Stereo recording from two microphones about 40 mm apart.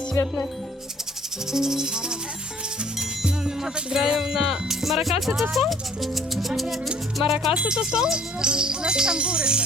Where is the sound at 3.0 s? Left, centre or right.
Right.